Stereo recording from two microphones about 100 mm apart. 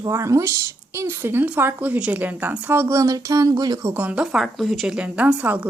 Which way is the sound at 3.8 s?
15° right (ahead or behind).